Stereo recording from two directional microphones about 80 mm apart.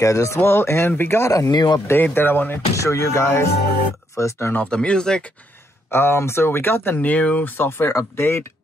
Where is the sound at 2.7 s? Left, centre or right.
Left.